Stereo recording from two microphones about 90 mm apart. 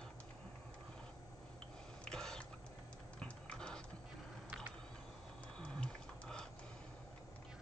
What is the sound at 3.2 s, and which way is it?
Dog, 10° left (ahead or behind).